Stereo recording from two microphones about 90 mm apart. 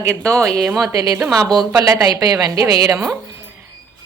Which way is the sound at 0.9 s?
45° right (ahead or behind).